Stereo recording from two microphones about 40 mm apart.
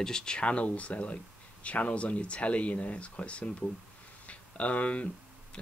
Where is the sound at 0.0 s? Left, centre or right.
Centre.